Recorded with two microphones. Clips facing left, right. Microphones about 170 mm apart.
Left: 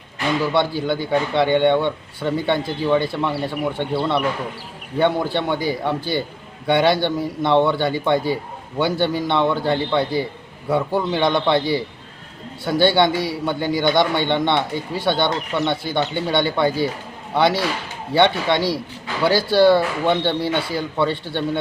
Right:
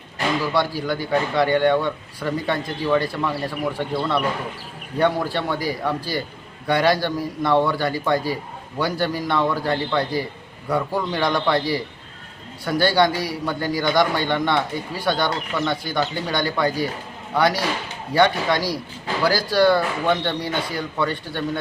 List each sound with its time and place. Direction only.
0.5 s a man's voice: 25° left (ahead or behind)